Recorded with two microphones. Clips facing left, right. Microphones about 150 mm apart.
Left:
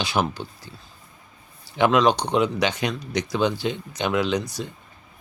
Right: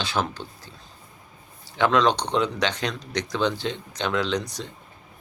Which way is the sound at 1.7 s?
10° left (ahead or behind).